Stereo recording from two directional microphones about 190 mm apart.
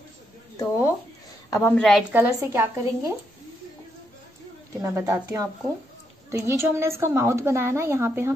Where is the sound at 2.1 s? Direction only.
10° right (ahead or behind).